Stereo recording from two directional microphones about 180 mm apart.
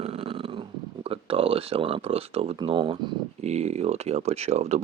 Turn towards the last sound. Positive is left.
turn(degrees=-35)  # may be behind; listen again after turning